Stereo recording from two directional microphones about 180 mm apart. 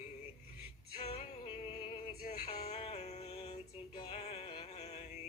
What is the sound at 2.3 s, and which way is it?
Music, 40° left (ahead or behind).